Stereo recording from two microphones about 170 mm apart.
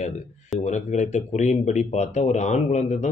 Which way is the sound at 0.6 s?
45° left (ahead or behind).